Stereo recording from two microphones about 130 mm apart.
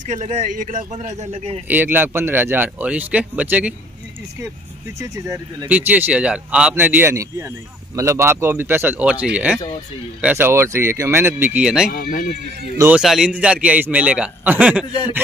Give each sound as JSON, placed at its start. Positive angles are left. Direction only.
{"t": 0.0, "sound": "a man's voice", "side_deg": -65}
{"t": 1.7, "sound": "a man's voice", "side_deg": -15}
{"t": 4.9, "sound": "speech", "side_deg": -25}
{"t": 5.7, "sound": "a man's voice", "side_deg": -15}
{"t": 11.9, "sound": "speech", "side_deg": 90}
{"t": 12.9, "sound": "a man's voice", "side_deg": -5}